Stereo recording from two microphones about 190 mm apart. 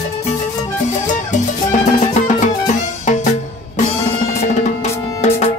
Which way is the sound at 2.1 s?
40° left (ahead or behind).